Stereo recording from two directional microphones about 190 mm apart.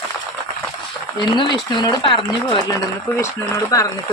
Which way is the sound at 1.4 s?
20° left (ahead or behind).